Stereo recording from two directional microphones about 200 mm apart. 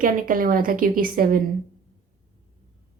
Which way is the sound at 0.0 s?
45° right (ahead or behind).